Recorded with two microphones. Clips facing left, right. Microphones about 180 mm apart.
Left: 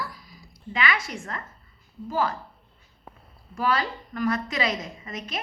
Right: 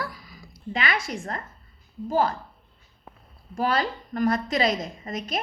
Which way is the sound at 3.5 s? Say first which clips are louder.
Right 1 dB; 40° right (ahead or behind).